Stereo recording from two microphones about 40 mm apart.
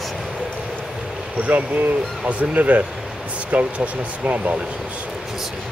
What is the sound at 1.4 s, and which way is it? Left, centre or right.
Speech, right.